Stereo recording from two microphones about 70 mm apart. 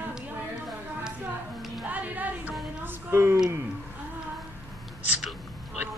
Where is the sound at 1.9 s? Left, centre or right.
Right.